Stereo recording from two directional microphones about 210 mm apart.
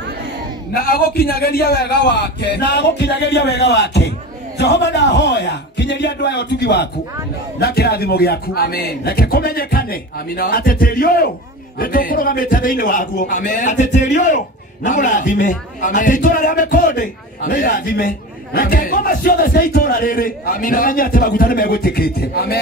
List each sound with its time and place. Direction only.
0.7 s a man's voice: 45° left (ahead or behind)